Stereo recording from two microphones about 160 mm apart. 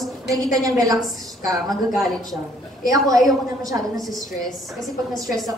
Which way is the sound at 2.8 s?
20° right (ahead or behind).